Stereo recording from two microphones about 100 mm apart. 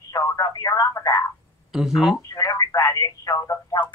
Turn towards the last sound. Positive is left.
turn(degrees=35)  # may be behind; listen again after turning